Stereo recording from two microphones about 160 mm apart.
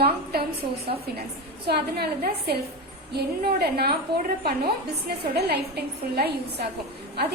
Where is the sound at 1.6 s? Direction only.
80° right.